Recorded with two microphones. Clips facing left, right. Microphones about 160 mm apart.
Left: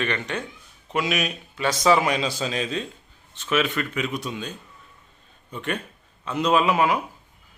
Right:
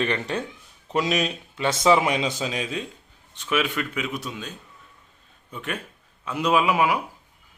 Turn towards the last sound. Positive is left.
turn(degrees=-10)  # may be behind; listen again after turning